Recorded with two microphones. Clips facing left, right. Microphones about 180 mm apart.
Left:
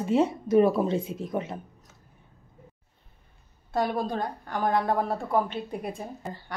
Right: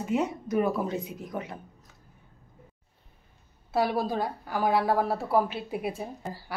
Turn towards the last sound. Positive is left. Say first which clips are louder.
# even
turn(degrees=-5)  # may be behind; listen again after turning